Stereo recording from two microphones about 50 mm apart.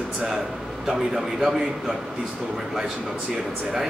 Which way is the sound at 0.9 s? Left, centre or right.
Centre.